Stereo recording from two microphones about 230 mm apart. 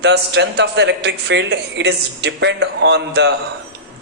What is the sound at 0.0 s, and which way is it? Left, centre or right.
A man's voice, right.